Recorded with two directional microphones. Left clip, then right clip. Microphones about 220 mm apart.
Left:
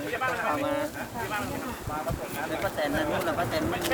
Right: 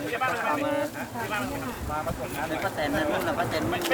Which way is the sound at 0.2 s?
50° right (ahead or behind).